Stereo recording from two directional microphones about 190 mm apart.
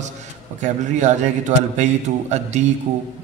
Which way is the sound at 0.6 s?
40° right (ahead or behind).